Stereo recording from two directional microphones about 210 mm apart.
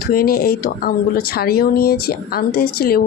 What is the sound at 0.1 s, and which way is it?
Speech, 45° left (ahead or behind).